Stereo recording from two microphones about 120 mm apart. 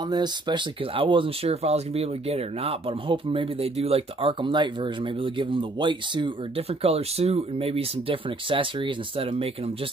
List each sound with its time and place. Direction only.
0.0 s speech: 35° right (ahead or behind); by 9.5 s 50° right (ahead or behind)